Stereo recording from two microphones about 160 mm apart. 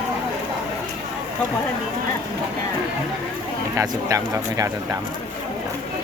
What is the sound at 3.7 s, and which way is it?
Speech, 20° right (ahead or behind).